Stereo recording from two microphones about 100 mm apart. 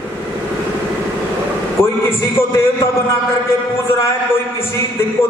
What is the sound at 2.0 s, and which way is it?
A man's voice, 25° left (ahead or behind).